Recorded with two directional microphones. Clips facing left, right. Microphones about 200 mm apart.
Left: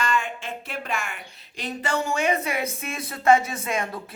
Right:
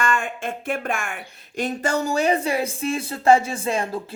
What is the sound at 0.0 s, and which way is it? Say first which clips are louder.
Speech: right 2 dB; 50° right (ahead or behind).